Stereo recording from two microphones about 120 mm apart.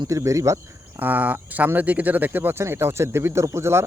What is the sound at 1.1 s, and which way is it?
Speech, 15° right (ahead or behind).